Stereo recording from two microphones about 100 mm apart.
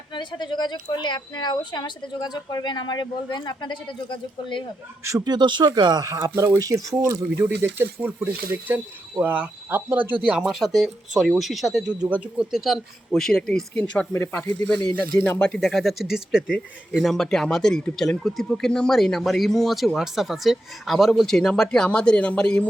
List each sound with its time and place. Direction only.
0.1 s speech: 50° left (ahead or behind)
5.2 s speech: 50° right (ahead or behind)
6.1 s speech: 35° right (ahead or behind); by 10.2 s 20° right (ahead or behind)
10.2 s speech: 5° right (ahead or behind)
12.0 s speech: 15° right (ahead or behind); by 14.1 s 10° left (ahead or behind)
14.1 s speech: 20° left (ahead or behind)
14.4 s speech: 40° left (ahead or behind)
15.1 s speech: 10° left (ahead or behind)